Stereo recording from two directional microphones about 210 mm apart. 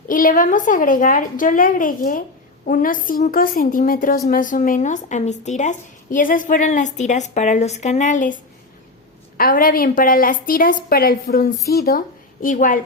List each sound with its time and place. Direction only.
0.1 s speech: 40° left (ahead or behind)
9.4 s a woman's voice: 40° left (ahead or behind)